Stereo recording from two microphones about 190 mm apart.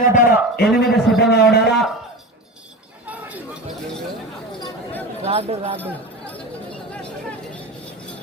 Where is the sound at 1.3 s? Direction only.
60° left (ahead or behind).